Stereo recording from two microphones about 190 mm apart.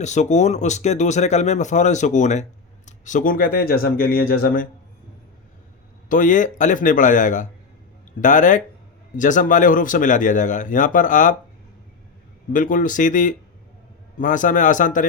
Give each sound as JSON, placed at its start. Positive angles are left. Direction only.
{"t": 0.0, "sound": "speech", "side_deg": 40}
{"t": 6.1, "sound": "speech", "side_deg": 45}
{"t": 12.5, "sound": "speech", "side_deg": 45}